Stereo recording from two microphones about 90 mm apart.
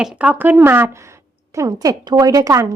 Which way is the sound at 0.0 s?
15° right (ahead or behind).